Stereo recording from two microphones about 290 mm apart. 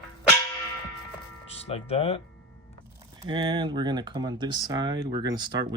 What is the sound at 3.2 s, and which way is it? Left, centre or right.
Speech, centre.